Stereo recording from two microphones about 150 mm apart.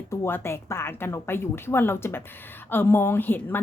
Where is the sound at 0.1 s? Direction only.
15° left (ahead or behind).